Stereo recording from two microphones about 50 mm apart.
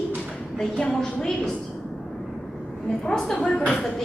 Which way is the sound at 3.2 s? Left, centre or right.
Centre.